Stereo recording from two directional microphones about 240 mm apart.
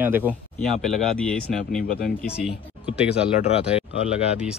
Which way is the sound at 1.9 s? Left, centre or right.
Left.